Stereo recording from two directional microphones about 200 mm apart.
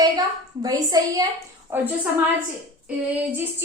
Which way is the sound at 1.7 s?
10° right (ahead or behind).